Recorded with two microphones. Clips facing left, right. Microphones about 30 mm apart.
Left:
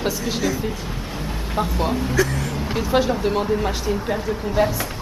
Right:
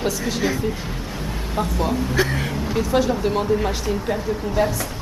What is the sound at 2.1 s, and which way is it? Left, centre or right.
Speech, right.